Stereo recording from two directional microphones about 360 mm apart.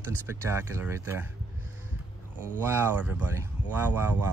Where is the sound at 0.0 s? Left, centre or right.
Centre.